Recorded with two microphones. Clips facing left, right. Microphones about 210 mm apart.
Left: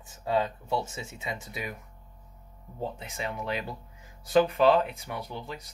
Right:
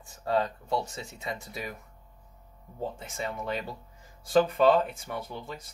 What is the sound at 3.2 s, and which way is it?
Speech, 10° left (ahead or behind).